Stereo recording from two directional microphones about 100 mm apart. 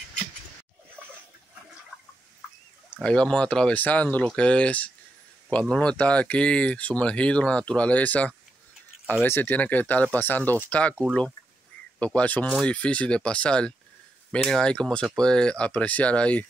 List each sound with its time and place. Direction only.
3.0 s speech: 10° left (ahead or behind)